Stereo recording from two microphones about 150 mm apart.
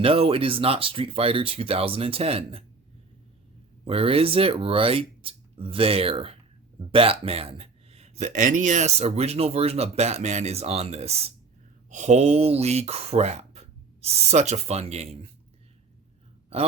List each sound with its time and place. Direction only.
0.0 s speech: 40° right (ahead or behind)
3.8 s speech: 40° right (ahead or behind)